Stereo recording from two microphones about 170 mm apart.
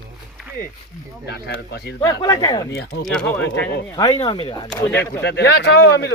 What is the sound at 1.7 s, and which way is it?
Speech, 75° left (ahead or behind).